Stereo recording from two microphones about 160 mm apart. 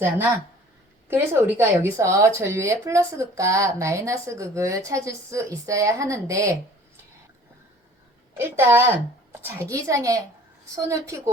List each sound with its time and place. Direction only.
1.0 s speech: 15° right (ahead or behind)
8.4 s a woman's voice: 15° right (ahead or behind)